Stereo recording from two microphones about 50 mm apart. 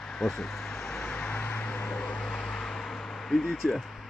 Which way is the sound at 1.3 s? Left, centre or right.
Left.